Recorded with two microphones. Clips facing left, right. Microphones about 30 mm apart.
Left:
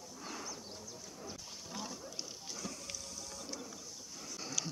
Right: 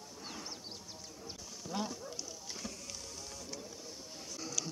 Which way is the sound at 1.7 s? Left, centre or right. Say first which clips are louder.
Right 7 dB; right.